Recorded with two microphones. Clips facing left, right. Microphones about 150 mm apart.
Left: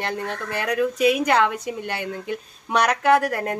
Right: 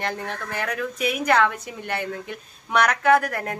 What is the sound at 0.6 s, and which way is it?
Speech, 20° left (ahead or behind).